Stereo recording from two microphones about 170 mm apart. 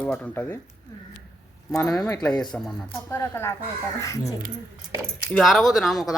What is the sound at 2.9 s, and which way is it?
Speech, 15° left (ahead or behind).